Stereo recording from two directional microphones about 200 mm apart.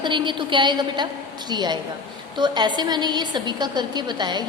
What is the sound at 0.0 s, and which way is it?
A woman's voice, 25° right (ahead or behind).